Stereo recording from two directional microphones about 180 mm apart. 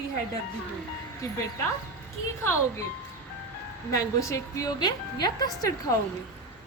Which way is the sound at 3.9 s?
20° left (ahead or behind).